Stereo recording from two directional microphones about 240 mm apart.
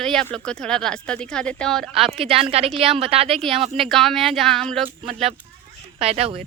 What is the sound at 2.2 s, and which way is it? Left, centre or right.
A woman's voice, right.